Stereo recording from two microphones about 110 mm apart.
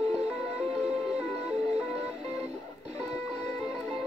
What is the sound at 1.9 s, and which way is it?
Music, 70° right (ahead or behind).